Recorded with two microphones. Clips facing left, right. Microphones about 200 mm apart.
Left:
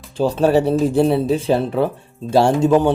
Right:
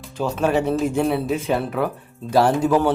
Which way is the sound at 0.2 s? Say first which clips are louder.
Left 5 dB; 30° left (ahead or behind).